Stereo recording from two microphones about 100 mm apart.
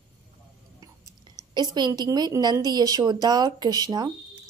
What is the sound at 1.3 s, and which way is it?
A woman's voice, 45° right (ahead or behind).